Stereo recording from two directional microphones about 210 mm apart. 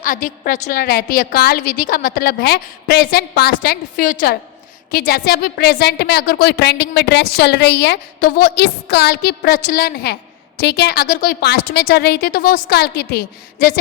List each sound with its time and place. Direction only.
0.0 s a woman's voice: 40° left (ahead or behind)